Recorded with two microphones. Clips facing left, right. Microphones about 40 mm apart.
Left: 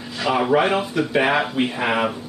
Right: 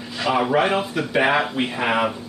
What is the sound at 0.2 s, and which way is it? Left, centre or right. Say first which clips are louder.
Speech: left 1 dB; centre.